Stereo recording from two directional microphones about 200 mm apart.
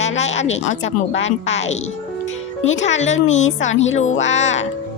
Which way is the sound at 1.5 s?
35° left (ahead or behind).